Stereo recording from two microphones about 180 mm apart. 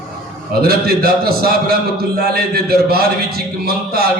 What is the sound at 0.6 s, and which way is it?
A man's voice, 60° right (ahead or behind).